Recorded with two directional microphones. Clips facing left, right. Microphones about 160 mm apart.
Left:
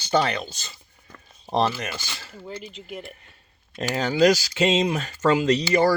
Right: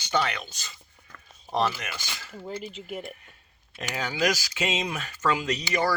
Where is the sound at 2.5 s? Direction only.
10° right (ahead or behind).